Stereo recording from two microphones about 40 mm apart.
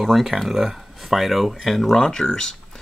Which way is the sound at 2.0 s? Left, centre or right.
Centre.